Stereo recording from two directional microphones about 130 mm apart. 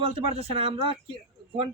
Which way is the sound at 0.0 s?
50° right (ahead or behind).